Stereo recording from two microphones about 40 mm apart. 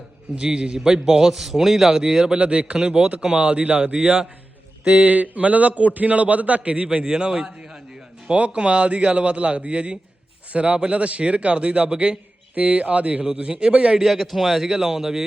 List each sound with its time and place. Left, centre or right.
0.3 s a man's voice: right
3.6 s a man's voice: right
3.9 s a man's voice: right
4.9 s a man's voice: right
6.8 s a man's voice: centre
8.4 s a man's voice: right
14.0 s a man's voice: centre